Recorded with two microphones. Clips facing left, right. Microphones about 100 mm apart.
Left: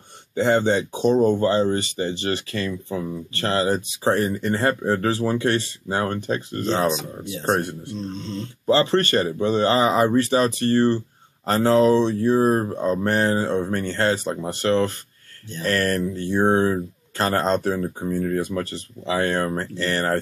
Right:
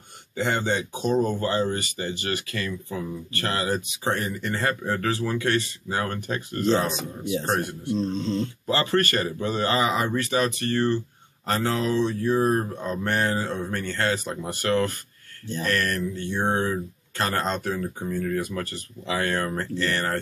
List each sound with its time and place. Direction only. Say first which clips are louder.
0.4 s speech: left 6 dB; 30° left (ahead or behind)